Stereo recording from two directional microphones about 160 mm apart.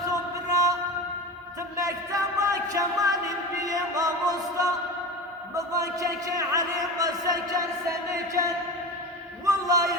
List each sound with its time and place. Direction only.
0.1 s music: 20° right (ahead or behind)
5.5 s a man's voice: 20° right (ahead or behind)